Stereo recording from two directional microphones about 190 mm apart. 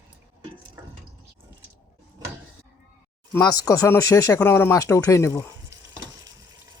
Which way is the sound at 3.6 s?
20° left (ahead or behind).